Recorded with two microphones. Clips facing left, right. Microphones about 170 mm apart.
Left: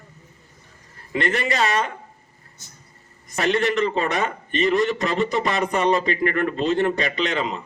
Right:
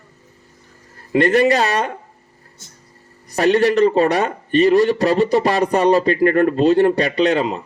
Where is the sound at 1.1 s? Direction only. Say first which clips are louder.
Right 10 dB; 40° right (ahead or behind).